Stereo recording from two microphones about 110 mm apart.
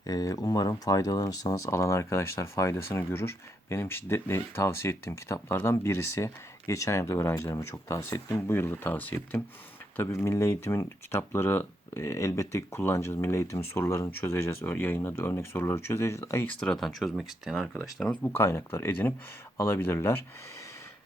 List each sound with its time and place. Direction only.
0.0 s speech: 35° left (ahead or behind)
16.5 s speech: 5° left (ahead or behind)
18.2 s speech: 20° left (ahead or behind)